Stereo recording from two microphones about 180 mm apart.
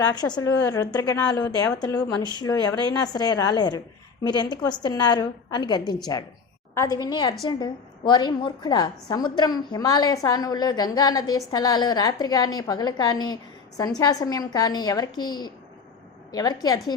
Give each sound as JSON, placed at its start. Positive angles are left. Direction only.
{"t": 0.0, "sound": "a woman's voice", "side_deg": 20}